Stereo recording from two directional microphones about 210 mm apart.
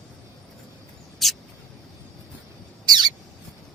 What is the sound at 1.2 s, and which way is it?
Mouse, centre (ahead or behind).